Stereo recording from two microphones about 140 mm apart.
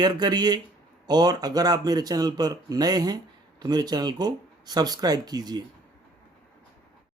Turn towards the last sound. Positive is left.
turn(degrees=-30)  # may be behind; listen again after turning